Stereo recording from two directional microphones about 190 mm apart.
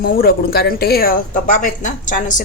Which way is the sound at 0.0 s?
50° left (ahead or behind).